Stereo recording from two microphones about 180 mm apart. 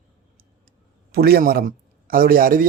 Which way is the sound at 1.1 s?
60° right (ahead or behind).